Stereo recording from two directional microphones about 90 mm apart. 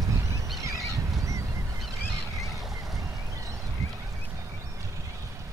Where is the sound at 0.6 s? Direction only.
35° right (ahead or behind).